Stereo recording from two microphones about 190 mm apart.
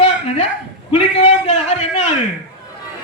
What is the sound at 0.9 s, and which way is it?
A man's voice, 30° left (ahead or behind).